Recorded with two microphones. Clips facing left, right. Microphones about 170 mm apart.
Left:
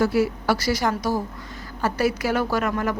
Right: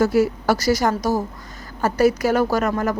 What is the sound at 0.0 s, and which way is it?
A woman's voice, 45° right (ahead or behind).